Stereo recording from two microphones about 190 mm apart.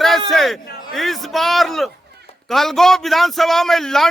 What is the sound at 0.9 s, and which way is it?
A man's voice, centre (ahead or behind).